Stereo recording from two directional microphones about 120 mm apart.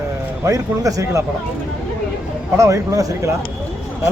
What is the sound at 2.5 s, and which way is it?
Speech, 25° right (ahead or behind).